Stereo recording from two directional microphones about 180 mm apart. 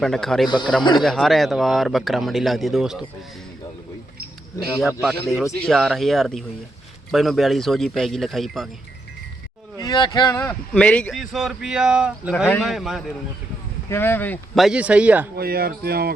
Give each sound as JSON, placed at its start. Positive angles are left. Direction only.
{"t": 0.0, "sound": "speech", "side_deg": 5}
{"t": 0.4, "sound": "speech", "side_deg": 25}
{"t": 1.0, "sound": "speech", "side_deg": 0}
{"t": 4.9, "sound": "speech", "side_deg": -10}
{"t": 5.1, "sound": "speech", "side_deg": 0}
{"t": 9.7, "sound": "speech", "side_deg": 20}
{"t": 10.4, "sound": "speech", "side_deg": 5}
{"t": 13.9, "sound": "speech", "side_deg": 10}
{"t": 14.6, "sound": "speech", "side_deg": -5}
{"t": 15.4, "sound": "speech", "side_deg": -55}